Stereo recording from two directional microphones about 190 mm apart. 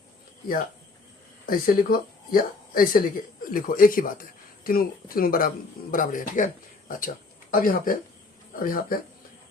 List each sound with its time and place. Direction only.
1.5 s speech: 50° left (ahead or behind)